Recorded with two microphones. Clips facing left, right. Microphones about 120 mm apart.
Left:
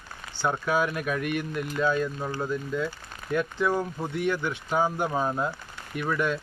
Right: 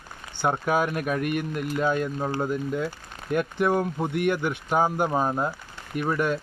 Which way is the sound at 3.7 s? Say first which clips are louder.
Right 4 dB; 15° right (ahead or behind).